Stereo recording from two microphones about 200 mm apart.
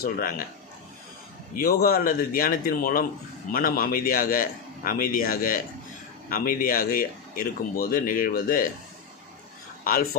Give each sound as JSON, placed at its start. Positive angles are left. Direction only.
{"t": 0.0, "sound": "speech", "side_deg": 45}
{"t": 1.5, "sound": "speech", "side_deg": 45}
{"t": 9.8, "sound": "speech", "side_deg": 45}